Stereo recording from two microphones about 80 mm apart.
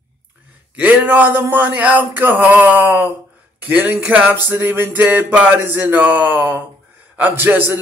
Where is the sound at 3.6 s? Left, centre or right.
Right.